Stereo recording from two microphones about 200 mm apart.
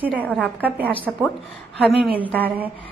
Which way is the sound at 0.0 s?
10° right (ahead or behind).